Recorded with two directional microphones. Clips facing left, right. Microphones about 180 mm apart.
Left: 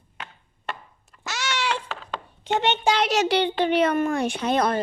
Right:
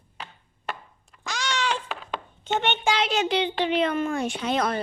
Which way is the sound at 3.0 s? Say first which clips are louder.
Left 3 dB; 75° left (ahead or behind).